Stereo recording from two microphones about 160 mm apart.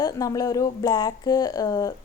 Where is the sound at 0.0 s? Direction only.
20° left (ahead or behind).